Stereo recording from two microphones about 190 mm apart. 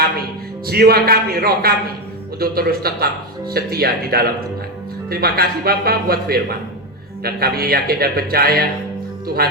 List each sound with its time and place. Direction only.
0.7 s speech: 55° right (ahead or behind)